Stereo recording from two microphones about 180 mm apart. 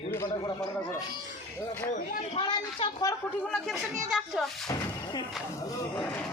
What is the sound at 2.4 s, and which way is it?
Speech, 25° left (ahead or behind).